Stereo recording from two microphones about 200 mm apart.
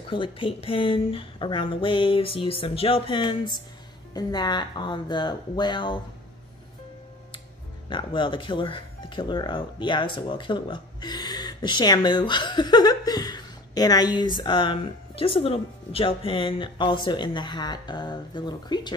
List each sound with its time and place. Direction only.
0.1 s speech: 25° left (ahead or behind)
7.9 s speech: 25° left (ahead or behind)